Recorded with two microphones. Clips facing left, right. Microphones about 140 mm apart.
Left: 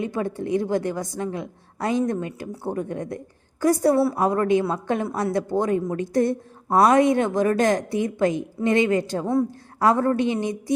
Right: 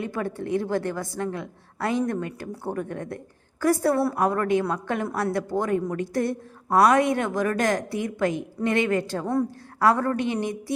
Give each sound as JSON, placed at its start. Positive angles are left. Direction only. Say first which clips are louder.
{"t": 0.0, "sound": "a woman's voice", "louder": "left 3 dB", "side_deg": 20}
{"t": 9.2, "sound": "a woman's voice", "louder": "left 3 dB", "side_deg": 5}
{"t": 9.8, "sound": "a woman's voice", "louder": "left 2 dB", "side_deg": 20}